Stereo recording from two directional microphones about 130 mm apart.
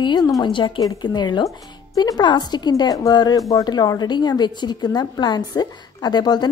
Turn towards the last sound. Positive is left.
turn(degrees=30)  # may be behind; listen again after turning